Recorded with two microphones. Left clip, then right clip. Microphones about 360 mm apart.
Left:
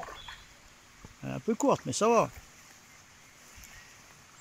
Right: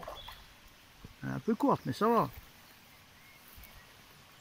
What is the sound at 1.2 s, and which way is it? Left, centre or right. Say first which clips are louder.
Speech: left 2 dB; centre.